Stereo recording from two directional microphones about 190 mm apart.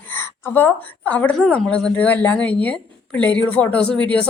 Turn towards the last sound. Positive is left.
turn(degrees=5)  # may be behind; listen again after turning